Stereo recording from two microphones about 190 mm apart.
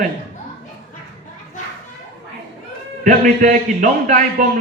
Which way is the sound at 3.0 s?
45° right (ahead or behind).